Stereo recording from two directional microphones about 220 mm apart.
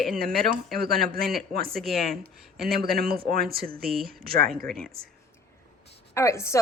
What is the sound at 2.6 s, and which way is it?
Speech, 45° right (ahead or behind).